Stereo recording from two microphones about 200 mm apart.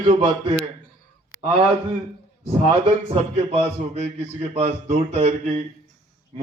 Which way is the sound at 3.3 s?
30° right (ahead or behind).